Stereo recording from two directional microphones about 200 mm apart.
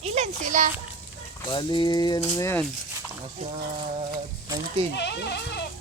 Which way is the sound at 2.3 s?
15° left (ahead or behind).